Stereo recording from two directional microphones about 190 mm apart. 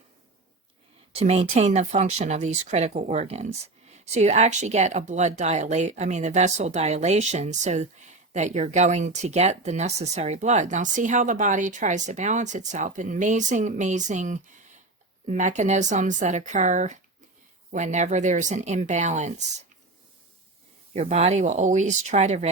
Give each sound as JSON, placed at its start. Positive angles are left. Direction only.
{"t": 1.1, "sound": "speech", "side_deg": -35}
{"t": 20.9, "sound": "speech", "side_deg": -35}